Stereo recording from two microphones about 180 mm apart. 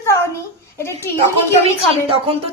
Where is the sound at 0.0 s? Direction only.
15° left (ahead or behind).